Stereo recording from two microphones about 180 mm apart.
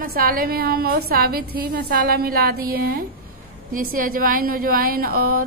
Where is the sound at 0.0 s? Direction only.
55° right (ahead or behind).